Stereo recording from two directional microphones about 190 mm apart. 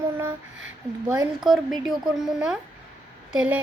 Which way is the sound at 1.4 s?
Centre (ahead or behind).